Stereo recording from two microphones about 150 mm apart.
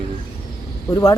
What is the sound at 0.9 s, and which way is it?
Speech, 20° left (ahead or behind).